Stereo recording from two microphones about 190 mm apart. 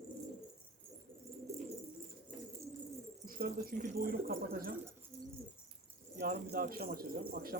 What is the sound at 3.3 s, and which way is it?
Speech, 50° right (ahead or behind).